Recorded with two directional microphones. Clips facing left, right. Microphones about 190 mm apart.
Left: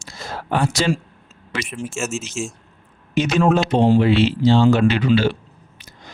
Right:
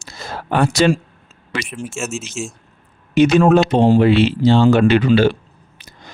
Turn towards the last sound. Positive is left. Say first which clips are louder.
# right 4 dB
turn(degrees=-50)  # may be behind; listen again after turning